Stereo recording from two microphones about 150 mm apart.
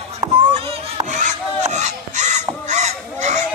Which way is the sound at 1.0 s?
55° right (ahead or behind).